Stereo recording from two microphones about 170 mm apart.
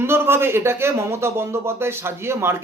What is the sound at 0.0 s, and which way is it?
Speech, 15° right (ahead or behind).